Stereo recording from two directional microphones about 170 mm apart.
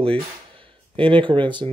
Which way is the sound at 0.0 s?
30° right (ahead or behind).